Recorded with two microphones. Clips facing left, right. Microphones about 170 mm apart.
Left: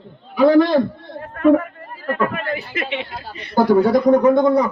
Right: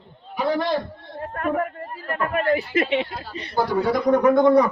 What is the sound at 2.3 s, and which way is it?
Speech, 40° right (ahead or behind).